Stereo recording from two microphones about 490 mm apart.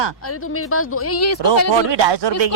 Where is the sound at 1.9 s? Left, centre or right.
Right.